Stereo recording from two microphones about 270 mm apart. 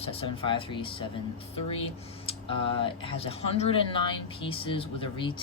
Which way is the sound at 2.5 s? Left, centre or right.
Centre.